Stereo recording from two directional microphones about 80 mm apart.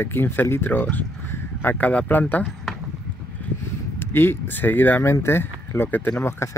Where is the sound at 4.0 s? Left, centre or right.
Left.